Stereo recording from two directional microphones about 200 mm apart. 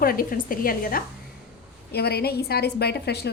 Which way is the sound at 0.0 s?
45° left (ahead or behind).